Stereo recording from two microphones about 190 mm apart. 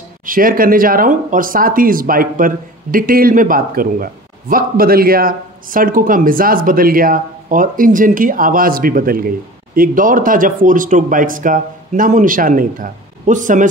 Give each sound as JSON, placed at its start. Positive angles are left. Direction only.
{"t": 0.3, "sound": "speech", "side_deg": -50}